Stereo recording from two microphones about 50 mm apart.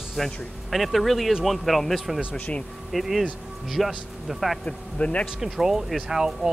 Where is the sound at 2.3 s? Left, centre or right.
Left.